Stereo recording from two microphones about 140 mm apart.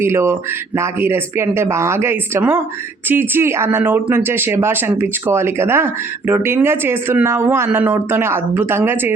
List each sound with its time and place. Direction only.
0.0 s speech: 20° right (ahead or behind)